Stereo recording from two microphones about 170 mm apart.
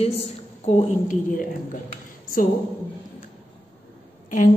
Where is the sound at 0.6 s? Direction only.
40° left (ahead or behind).